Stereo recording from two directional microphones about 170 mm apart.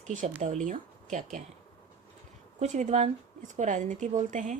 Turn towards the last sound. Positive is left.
turn(degrees=-45)  # may be behind; listen again after turning